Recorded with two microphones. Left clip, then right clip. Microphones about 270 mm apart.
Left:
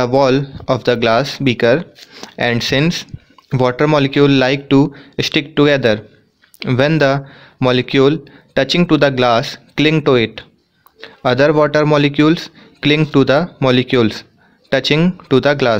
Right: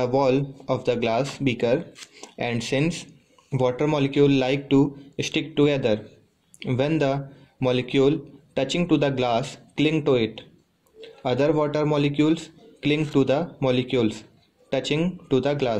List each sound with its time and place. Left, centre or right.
0.0 s speech: left